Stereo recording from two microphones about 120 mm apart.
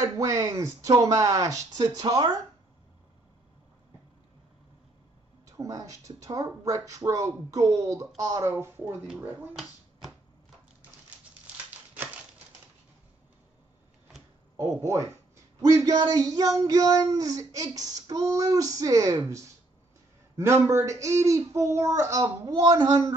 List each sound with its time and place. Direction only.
0.0 s child singing: 25° right (ahead or behind)
5.6 s child singing: 25° right (ahead or behind)
14.6 s child singing: 25° right (ahead or behind)
16.0 s a sound: 30° right (ahead or behind)
16.6 s child singing: 30° right (ahead or behind)